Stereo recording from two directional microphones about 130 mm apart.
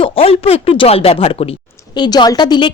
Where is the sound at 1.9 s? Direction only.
35° left (ahead or behind).